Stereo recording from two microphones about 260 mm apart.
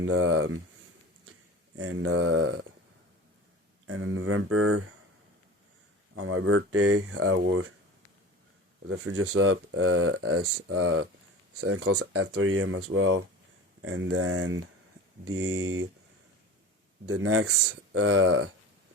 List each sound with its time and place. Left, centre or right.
0.0 s speech: right
1.7 s speech: right
3.8 s speech: right
6.1 s speech: right
8.9 s speech: right
17.1 s speech: right